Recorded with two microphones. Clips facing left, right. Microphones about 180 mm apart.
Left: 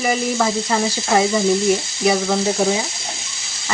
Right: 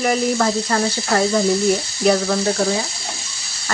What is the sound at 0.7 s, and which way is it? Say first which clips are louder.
Speech: left 1 dB; 20° left (ahead or behind).